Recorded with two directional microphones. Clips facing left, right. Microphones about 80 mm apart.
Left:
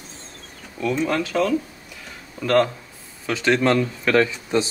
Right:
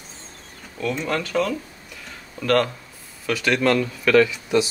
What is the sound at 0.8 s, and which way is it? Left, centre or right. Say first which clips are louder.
Speech: left 3 dB; centre.